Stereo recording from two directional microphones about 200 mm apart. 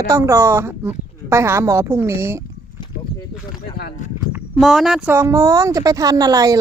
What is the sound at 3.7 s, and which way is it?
Speech, 50° left (ahead or behind).